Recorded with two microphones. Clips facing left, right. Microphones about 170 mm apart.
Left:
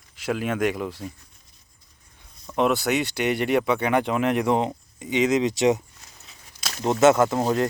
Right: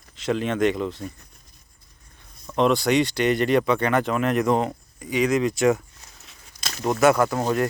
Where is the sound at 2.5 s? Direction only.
5° left (ahead or behind).